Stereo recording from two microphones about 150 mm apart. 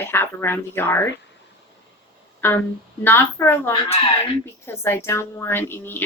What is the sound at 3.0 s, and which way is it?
A woman's voice, 15° left (ahead or behind).